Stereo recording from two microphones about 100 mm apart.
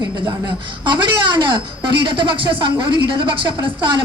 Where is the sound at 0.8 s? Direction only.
50° right (ahead or behind).